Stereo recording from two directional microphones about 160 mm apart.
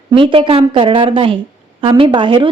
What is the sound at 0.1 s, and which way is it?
A woman's voice, 30° right (ahead or behind).